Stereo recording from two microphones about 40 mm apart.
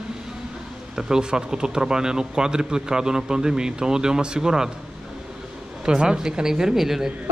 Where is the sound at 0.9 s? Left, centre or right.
Centre.